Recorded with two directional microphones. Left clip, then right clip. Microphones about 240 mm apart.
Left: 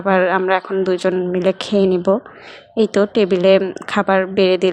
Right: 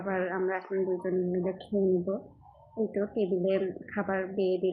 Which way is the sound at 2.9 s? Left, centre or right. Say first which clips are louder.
Left 14 dB; left.